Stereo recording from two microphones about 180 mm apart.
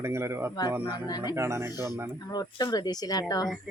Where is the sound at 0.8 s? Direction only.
20° left (ahead or behind).